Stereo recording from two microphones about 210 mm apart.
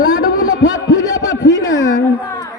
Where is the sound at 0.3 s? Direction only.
65° left (ahead or behind).